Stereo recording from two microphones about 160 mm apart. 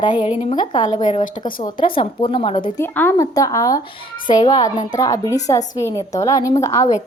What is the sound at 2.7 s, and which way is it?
A woman's voice, 15° left (ahead or behind).